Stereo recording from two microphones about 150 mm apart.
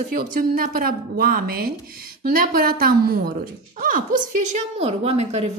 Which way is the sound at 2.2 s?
75° right (ahead or behind).